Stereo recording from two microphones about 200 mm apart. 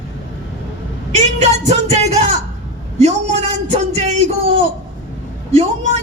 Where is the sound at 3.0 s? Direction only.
35° right (ahead or behind).